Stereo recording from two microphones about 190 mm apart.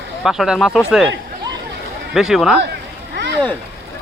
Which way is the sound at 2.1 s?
Centre (ahead or behind).